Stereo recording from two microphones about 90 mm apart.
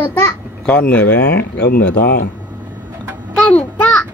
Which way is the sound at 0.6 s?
15° left (ahead or behind).